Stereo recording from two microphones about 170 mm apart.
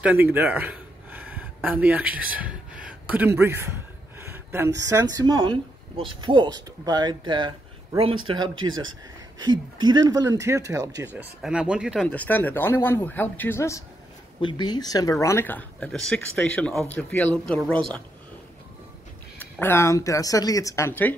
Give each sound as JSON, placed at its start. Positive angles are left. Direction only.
{"t": 0.0, "sound": "speech", "side_deg": -10}
{"t": 4.2, "sound": "a sound", "side_deg": -15}
{"t": 4.8, "sound": "speech", "side_deg": -20}
{"t": 11.4, "sound": "speech", "side_deg": -5}
{"t": 12.0, "sound": "speech", "side_deg": 10}
{"t": 19.3, "sound": "speech", "side_deg": 15}